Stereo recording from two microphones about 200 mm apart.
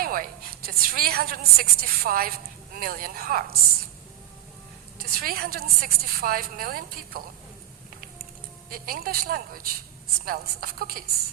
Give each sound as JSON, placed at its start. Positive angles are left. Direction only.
{"t": 0.0, "sound": "a woman's voice", "side_deg": -45}
{"t": 5.1, "sound": "a woman's voice", "side_deg": -50}
{"t": 8.7, "sound": "a woman's voice", "side_deg": -45}